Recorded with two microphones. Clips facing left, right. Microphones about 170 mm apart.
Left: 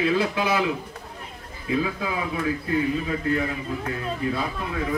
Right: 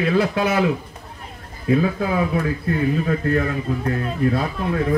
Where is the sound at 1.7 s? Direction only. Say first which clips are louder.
Right 6 dB; 45° right (ahead or behind).